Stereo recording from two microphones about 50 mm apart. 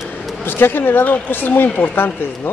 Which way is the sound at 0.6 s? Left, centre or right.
Left.